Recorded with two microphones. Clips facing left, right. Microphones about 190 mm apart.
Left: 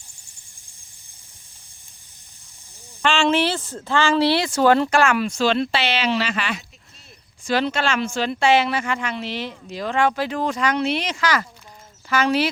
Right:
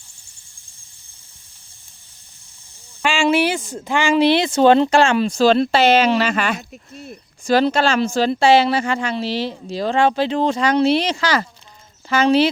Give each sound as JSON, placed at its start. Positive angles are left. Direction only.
{"t": 3.0, "sound": "speech", "side_deg": -10}
{"t": 7.5, "sound": "speech", "side_deg": -35}